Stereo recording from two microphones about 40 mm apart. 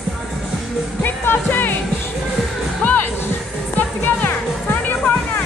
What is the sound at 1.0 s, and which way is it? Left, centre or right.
Music, left.